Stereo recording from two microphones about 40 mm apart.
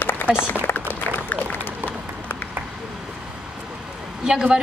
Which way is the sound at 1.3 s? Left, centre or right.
Left.